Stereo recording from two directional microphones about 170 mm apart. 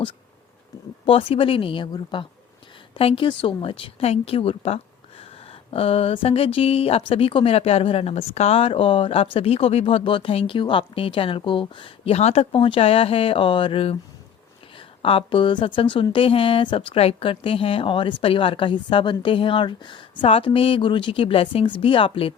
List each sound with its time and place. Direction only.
1.0 s speech: 30° left (ahead or behind)